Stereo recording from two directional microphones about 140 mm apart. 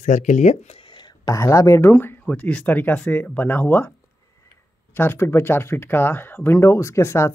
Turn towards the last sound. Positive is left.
turn(degrees=20)  # may be behind; listen again after turning